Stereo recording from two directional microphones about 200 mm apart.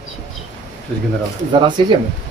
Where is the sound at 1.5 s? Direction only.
20° right (ahead or behind).